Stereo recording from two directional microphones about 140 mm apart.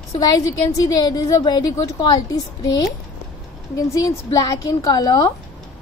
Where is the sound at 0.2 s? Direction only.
25° left (ahead or behind).